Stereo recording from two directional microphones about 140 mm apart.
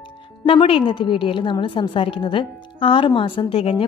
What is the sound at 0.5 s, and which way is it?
A woman's voice, 40° left (ahead or behind).